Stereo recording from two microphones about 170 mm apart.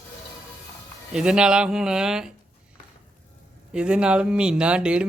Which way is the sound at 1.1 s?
5° right (ahead or behind).